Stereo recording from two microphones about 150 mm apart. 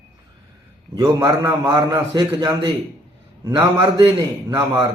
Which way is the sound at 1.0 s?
25° right (ahead or behind).